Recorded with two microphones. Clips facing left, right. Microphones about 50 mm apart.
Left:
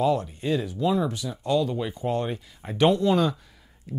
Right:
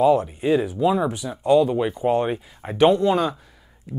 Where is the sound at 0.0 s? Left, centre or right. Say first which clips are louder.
Right 6 dB; centre.